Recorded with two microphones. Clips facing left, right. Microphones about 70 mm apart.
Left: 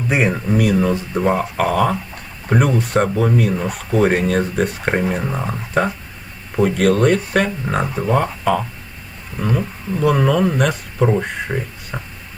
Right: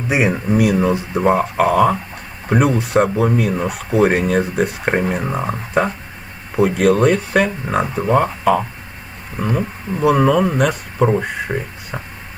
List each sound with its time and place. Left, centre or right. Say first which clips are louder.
0.1 s speech: right 2 dB; centre
10.0 s speech: right 2 dB; centre